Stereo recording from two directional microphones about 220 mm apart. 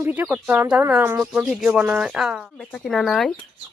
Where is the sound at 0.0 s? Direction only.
5° right (ahead or behind).